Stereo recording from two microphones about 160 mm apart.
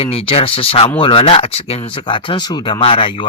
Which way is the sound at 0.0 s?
35° left (ahead or behind).